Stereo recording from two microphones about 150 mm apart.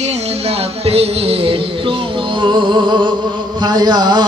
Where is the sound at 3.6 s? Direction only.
30° right (ahead or behind).